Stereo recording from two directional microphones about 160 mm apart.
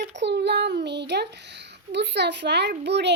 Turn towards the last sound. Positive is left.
turn(degrees=-90)